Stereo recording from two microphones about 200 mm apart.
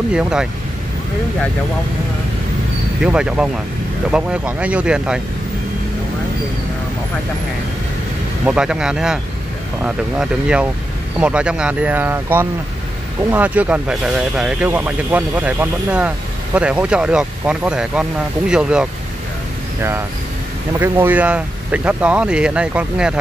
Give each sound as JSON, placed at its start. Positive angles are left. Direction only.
{"t": 0.1, "sound": "speech", "side_deg": -5}
{"t": 3.0, "sound": "speech", "side_deg": -5}
{"t": 8.5, "sound": "speech", "side_deg": -5}
{"t": 20.8, "sound": "speech", "side_deg": -10}